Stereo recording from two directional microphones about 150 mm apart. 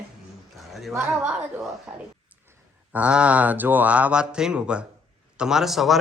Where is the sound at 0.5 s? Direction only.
Centre (ahead or behind).